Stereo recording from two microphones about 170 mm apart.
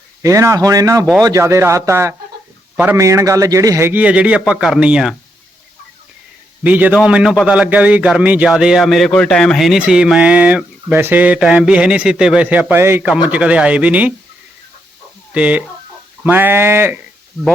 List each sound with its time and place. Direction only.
0.2 s a man's voice: 20° right (ahead or behind)
6.6 s a man's voice: 10° right (ahead or behind)
15.3 s a man's voice: 5° right (ahead or behind)